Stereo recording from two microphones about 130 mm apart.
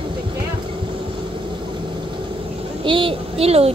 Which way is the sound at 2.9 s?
40° right (ahead or behind).